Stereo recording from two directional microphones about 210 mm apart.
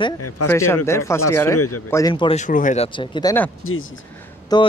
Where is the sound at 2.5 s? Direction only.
40° left (ahead or behind).